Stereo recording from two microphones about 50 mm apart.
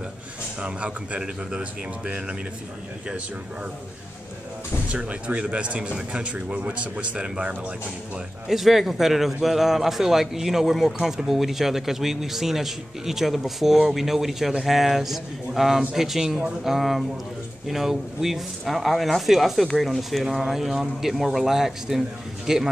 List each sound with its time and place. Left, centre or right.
0.6 s speech: right
4.9 s speech: right
8.5 s a man's voice: centre